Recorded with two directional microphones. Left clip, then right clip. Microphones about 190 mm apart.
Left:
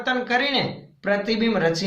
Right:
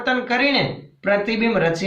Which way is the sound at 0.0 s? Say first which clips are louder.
Right 3 dB; 30° left (ahead or behind).